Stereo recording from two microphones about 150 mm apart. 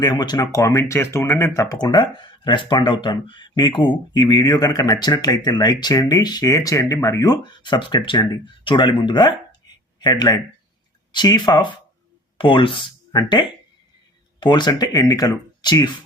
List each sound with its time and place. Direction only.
0.0 s speech: 30° left (ahead or behind)